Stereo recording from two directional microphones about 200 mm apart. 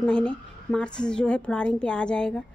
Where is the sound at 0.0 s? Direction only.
5° left (ahead or behind).